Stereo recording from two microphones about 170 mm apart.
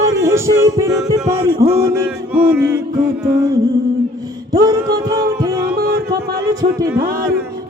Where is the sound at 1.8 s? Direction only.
20° right (ahead or behind).